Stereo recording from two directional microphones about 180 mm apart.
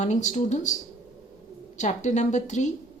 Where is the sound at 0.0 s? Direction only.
40° left (ahead or behind).